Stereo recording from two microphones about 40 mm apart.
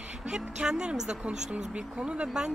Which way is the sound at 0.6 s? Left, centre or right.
Right.